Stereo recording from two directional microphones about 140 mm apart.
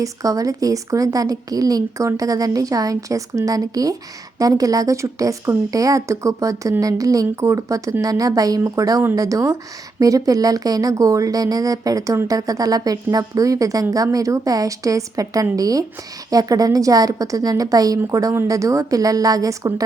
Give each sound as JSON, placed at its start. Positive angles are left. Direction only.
{"t": 0.0, "sound": "speech", "side_deg": -25}